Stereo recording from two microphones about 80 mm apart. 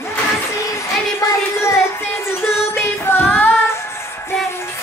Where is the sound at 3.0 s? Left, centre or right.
Left.